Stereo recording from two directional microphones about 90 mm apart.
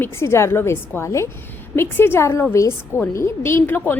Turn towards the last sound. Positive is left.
turn(degrees=25)  # may be behind; listen again after turning